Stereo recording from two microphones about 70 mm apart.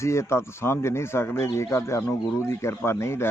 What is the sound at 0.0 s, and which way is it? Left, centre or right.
A man's voice, left.